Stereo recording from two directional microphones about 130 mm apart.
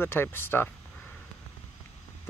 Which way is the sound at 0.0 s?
15° left (ahead or behind).